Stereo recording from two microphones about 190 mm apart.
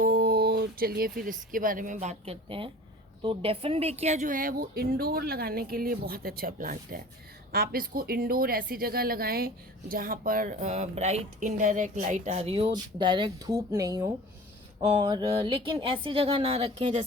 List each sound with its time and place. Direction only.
0.0 s a woman's voice: 55° right (ahead or behind); by 17.1 s 40° right (ahead or behind)